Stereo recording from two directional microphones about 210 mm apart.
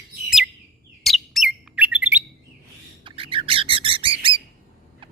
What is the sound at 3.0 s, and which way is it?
Bird, 25° right (ahead or behind).